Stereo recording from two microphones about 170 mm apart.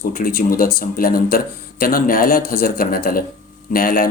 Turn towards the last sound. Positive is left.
turn(degrees=60)  # may be behind; listen again after turning